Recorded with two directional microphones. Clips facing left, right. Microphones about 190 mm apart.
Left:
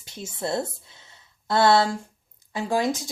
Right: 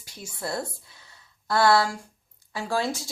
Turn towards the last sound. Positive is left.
turn(degrees=20)  # may be behind; listen again after turning